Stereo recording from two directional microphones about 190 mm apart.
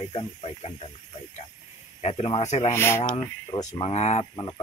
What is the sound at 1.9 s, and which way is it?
Speech, 35° left (ahead or behind).